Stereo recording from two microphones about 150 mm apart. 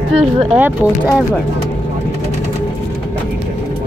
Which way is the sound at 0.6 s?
10° right (ahead or behind).